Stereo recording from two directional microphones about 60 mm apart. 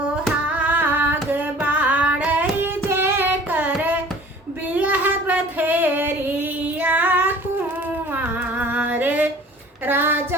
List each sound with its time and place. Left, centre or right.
0.4 s singing: right
3.8 s hands: right
4.7 s child singing: right
8.6 s music: right
9.8 s a sound: right